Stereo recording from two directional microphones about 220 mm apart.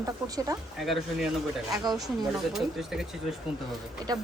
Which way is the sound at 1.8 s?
15° right (ahead or behind).